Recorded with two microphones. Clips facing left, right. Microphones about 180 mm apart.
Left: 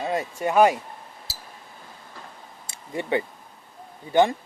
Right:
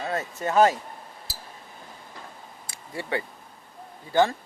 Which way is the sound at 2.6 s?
20° left (ahead or behind).